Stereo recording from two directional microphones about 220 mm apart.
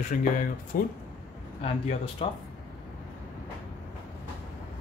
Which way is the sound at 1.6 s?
30° left (ahead or behind).